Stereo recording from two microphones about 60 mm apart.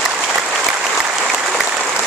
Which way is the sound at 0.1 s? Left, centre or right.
Centre.